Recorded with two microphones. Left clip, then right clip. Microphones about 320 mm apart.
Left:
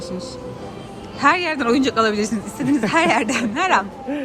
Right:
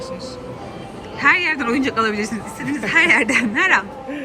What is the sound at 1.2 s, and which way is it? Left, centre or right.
Speech, centre.